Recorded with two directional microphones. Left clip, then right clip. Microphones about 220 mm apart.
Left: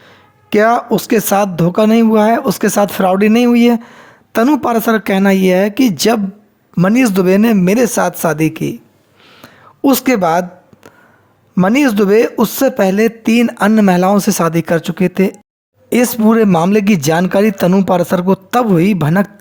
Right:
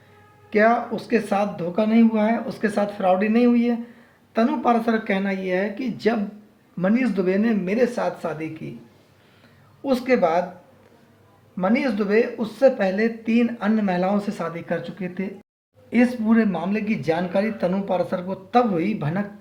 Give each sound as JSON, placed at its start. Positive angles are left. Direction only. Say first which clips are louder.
{"t": 0.5, "sound": "speech", "louder": "left 8 dB", "side_deg": 55}
{"t": 9.4, "sound": "a sound", "louder": "left 17 dB", "side_deg": 55}
{"t": 11.5, "sound": "speech", "louder": "left 10 dB", "side_deg": 50}